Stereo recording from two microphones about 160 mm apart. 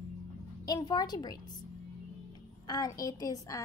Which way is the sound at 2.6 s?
25° left (ahead or behind).